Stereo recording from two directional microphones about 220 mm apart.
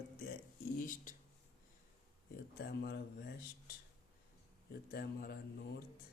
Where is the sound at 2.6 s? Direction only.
45° left (ahead or behind).